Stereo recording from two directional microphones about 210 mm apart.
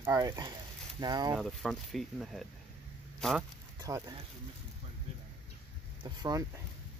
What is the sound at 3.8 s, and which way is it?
Speech, 20° right (ahead or behind).